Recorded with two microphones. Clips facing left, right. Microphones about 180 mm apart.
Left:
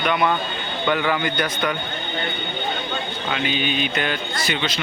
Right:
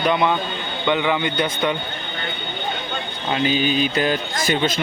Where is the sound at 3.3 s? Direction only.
40° right (ahead or behind).